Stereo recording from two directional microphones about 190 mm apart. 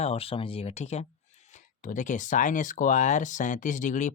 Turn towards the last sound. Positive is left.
turn(degrees=40)  # may be behind; listen again after turning